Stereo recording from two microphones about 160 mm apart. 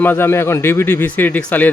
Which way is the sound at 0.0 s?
10° left (ahead or behind).